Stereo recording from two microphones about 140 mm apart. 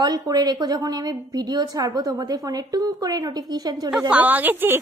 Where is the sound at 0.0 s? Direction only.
30° right (ahead or behind).